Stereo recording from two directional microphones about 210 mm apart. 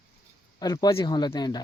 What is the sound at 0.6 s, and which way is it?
Speech, 20° left (ahead or behind).